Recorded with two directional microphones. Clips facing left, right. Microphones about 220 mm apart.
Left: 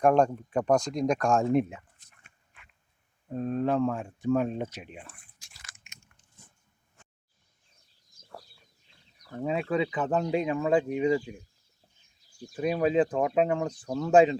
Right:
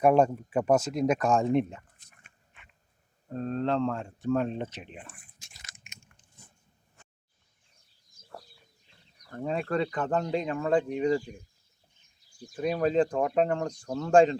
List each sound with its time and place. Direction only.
0.0 s speech: 5° right (ahead or behind)
3.3 s speech: 10° left (ahead or behind)
5.4 s biting: 20° right (ahead or behind)
9.3 s speech: 5° left (ahead or behind)
12.5 s speech: 10° left (ahead or behind)